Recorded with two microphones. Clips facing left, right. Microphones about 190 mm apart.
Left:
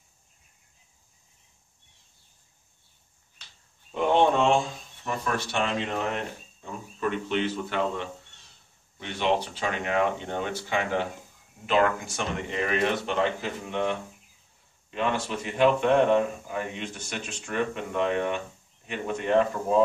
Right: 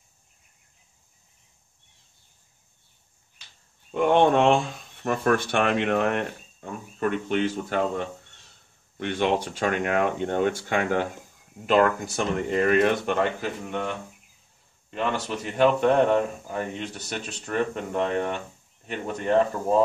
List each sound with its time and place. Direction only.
3.9 s speech: 55° right (ahead or behind)
14.9 s speech: 45° right (ahead or behind)